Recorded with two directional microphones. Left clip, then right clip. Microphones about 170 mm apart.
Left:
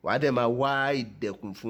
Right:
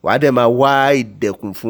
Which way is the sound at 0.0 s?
40° right (ahead or behind).